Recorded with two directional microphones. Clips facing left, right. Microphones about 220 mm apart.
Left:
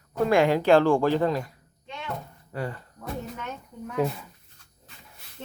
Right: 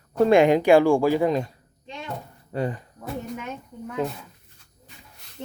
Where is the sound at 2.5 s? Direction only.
20° right (ahead or behind).